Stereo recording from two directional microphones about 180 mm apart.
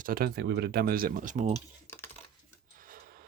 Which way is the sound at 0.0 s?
55° right (ahead or behind).